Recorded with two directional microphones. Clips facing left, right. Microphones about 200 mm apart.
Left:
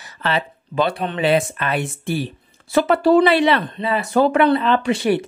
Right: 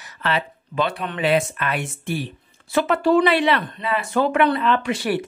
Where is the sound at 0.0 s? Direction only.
30° left (ahead or behind).